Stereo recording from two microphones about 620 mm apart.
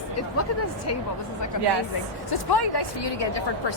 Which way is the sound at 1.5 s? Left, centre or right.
Left.